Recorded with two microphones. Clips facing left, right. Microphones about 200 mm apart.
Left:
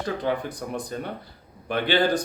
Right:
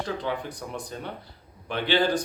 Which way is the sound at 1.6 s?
50° left (ahead or behind).